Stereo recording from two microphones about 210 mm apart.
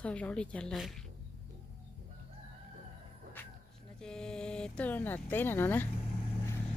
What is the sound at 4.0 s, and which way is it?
Speech, 5° left (ahead or behind).